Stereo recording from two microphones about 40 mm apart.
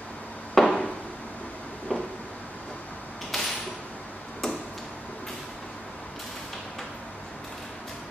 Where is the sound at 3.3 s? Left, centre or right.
Centre.